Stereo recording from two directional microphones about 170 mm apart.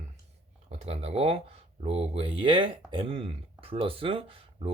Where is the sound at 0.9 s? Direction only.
35° right (ahead or behind).